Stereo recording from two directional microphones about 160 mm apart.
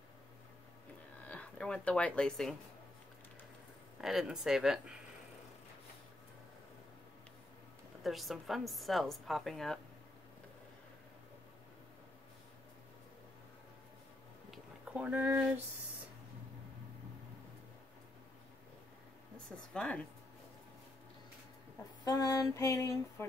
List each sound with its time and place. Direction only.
1.2 s speech: 10° left (ahead or behind)
4.0 s a woman's voice: centre (ahead or behind)
8.0 s a woman's voice: centre (ahead or behind)
14.5 s a sound: 5° right (ahead or behind)
19.3 s speech: 5° left (ahead or behind)
22.0 s a sound: 20° left (ahead or behind)